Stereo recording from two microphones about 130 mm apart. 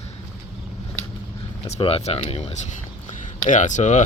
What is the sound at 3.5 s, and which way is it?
Speech, 70° left (ahead or behind).